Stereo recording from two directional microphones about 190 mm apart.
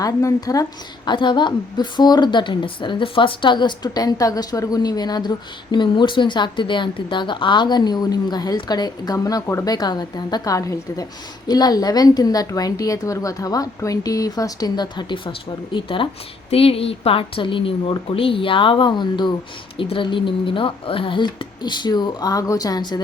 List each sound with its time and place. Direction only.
0.0 s a woman's voice: 15° left (ahead or behind)